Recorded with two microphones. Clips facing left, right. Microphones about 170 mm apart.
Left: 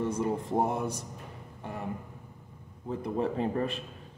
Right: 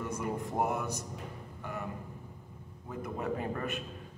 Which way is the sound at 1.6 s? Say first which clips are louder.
Left 1 dB; 30° left (ahead or behind).